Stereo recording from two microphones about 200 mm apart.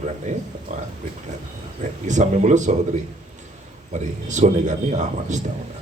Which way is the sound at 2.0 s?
35° right (ahead or behind).